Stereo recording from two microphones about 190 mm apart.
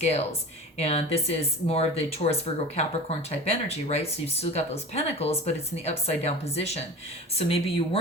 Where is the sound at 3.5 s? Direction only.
35° left (ahead or behind).